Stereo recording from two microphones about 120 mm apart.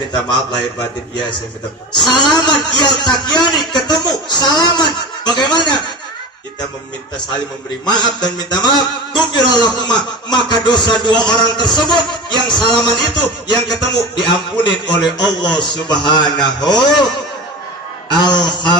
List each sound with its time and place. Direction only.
0.1 s a man's voice: 40° left (ahead or behind)
2.0 s a sound: 35° left (ahead or behind)
7.2 s a man's voice: 40° left (ahead or behind)
18.1 s a man's voice: 35° left (ahead or behind)